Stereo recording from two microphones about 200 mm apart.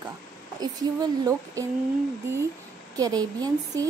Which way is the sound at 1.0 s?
20° right (ahead or behind).